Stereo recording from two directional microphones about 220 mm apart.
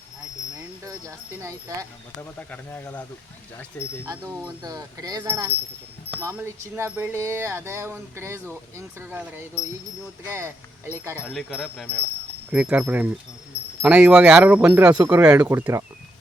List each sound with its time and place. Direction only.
0.9 s speech: 15° right (ahead or behind)
2.1 s speech: 5° left (ahead or behind)
4.0 s speech: 10° right (ahead or behind)
10.2 s speech: 10° right (ahead or behind)
11.2 s speech: centre (ahead or behind)